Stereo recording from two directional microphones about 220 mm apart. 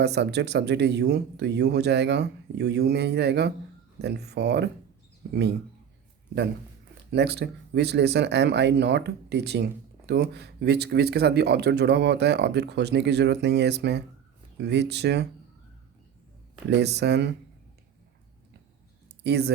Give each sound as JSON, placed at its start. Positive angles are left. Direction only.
{"t": 0.0, "sound": "speech", "side_deg": -50}
{"t": 7.1, "sound": "speech", "side_deg": -50}
{"t": 16.6, "sound": "speech", "side_deg": -50}
{"t": 19.2, "sound": "speech", "side_deg": -50}